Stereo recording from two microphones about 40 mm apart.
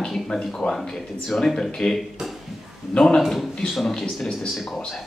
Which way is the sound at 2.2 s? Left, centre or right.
Centre.